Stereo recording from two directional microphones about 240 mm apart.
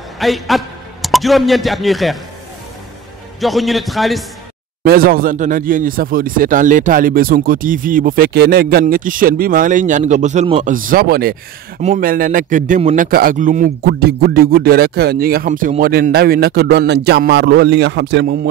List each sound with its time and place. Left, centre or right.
0.2 s a man's voice: centre
3.3 s a man's voice: centre
4.8 s a man's voice: right